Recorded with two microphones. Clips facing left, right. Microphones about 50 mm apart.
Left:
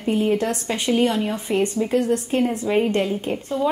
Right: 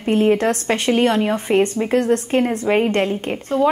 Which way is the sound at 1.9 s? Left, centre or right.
Right.